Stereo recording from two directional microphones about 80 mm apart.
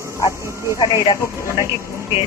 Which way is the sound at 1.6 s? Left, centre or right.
Left.